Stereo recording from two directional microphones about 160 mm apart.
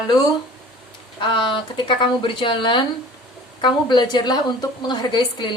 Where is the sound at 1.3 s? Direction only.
30° left (ahead or behind).